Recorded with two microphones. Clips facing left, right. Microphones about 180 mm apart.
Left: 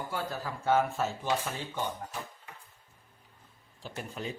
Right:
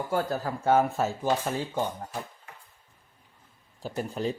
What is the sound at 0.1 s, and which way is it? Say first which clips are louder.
Speech: right 7 dB; 45° right (ahead or behind).